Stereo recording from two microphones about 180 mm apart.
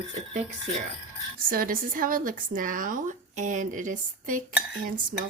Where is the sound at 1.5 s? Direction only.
50° right (ahead or behind).